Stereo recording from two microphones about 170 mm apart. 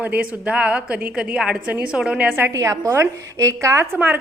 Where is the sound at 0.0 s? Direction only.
10° right (ahead or behind).